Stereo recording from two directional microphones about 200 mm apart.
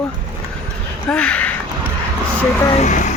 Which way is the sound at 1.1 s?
5° left (ahead or behind).